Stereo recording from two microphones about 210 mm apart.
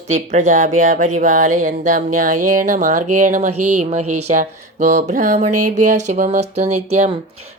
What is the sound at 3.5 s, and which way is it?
Speech, 90° right.